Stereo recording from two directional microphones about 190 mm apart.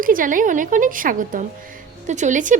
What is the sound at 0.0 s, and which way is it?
A woman's voice, 45° right (ahead or behind).